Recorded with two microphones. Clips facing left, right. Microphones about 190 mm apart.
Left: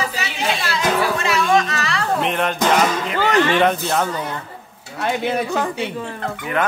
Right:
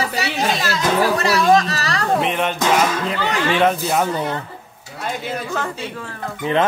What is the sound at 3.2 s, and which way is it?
Speech, 45° left (ahead or behind).